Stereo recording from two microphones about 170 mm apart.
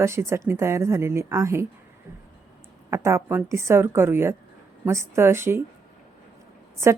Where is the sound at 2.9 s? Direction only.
15° right (ahead or behind).